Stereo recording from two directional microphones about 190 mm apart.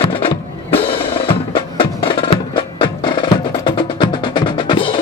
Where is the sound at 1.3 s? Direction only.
25° left (ahead or behind).